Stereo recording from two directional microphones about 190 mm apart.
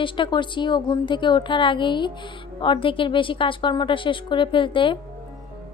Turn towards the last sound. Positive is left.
turn(degrees=25)  # may be behind; listen again after turning